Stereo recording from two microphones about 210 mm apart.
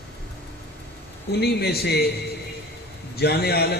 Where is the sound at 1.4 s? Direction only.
50° left (ahead or behind).